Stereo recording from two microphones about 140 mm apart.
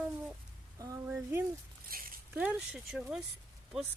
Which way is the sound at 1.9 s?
90° right.